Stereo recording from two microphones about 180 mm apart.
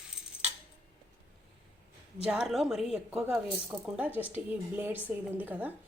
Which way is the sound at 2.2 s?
5° right (ahead or behind).